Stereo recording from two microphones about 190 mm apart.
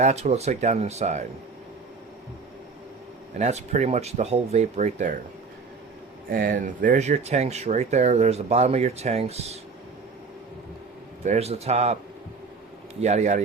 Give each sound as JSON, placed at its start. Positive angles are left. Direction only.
{"t": 0.0, "sound": "speech", "side_deg": -35}
{"t": 3.3, "sound": "speech", "side_deg": -35}
{"t": 6.3, "sound": "speech", "side_deg": -45}
{"t": 11.2, "sound": "speech", "side_deg": -35}
{"t": 13.0, "sound": "speech", "side_deg": -35}